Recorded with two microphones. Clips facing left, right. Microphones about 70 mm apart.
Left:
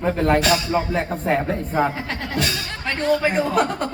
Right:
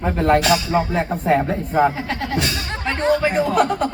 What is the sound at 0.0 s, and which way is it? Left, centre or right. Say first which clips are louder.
Speech: right 2 dB; centre.